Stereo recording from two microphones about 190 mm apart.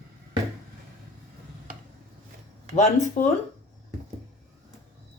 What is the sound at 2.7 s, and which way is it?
Speech, 40° left (ahead or behind).